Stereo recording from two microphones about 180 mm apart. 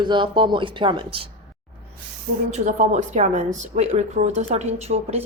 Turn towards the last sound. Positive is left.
turn(degrees=-35)  # may be behind; listen again after turning